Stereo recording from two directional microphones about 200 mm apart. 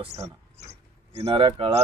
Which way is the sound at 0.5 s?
35° right (ahead or behind).